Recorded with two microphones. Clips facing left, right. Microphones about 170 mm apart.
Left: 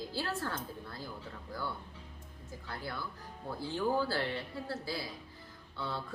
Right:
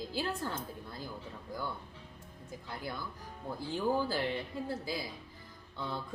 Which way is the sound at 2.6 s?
15° right (ahead or behind).